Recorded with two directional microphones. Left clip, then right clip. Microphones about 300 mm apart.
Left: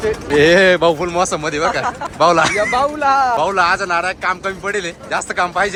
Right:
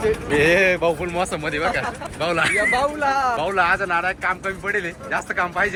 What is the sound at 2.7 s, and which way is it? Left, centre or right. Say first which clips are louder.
Speech: left 6 dB; left.